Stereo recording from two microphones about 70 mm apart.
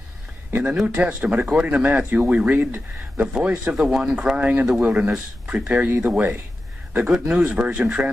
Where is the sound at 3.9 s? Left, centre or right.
Centre.